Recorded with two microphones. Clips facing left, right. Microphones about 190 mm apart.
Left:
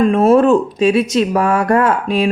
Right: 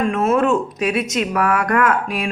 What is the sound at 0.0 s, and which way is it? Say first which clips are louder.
Speech: left 7 dB; 35° left (ahead or behind).